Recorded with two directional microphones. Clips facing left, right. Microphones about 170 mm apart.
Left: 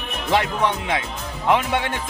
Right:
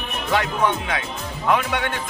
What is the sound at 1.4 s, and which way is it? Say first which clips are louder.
Speech: left 1 dB; 25° left (ahead or behind).